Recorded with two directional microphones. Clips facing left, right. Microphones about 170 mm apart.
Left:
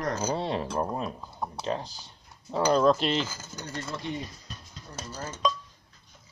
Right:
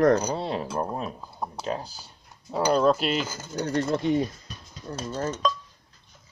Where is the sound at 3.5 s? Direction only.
55° right (ahead or behind).